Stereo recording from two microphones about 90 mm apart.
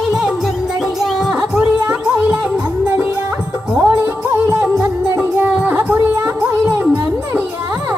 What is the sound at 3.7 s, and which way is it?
Music, 15° right (ahead or behind).